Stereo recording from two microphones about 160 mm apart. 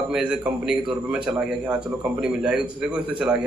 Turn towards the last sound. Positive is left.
turn(degrees=-5)  # may be behind; listen again after turning